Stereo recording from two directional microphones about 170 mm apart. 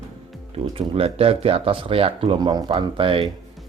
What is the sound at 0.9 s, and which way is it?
Speech, 35° right (ahead or behind).